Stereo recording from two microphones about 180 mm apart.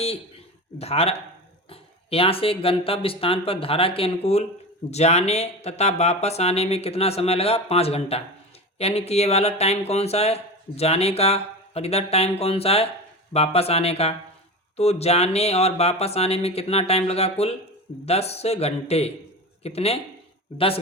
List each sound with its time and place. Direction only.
0.8 s speech: 35° left (ahead or behind)